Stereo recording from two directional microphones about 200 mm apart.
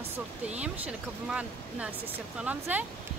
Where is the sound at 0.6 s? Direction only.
5° right (ahead or behind).